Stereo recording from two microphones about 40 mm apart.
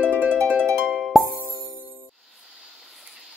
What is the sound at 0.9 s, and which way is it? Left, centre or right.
Music, centre.